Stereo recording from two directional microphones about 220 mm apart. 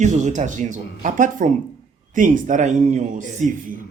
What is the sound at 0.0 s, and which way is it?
A man's voice, 35° right (ahead or behind).